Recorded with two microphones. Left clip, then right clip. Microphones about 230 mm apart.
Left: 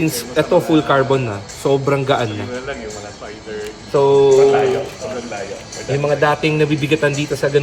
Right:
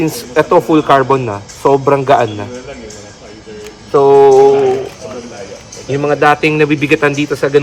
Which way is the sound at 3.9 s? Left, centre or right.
Right.